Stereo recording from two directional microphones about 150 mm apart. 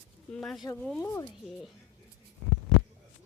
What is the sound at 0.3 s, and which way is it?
Speech, centre (ahead or behind).